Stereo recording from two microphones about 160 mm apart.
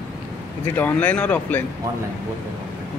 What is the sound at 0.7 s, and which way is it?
Speech, 10° left (ahead or behind).